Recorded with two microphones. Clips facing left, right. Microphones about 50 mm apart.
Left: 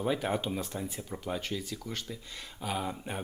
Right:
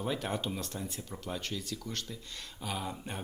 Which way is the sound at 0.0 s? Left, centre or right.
Centre.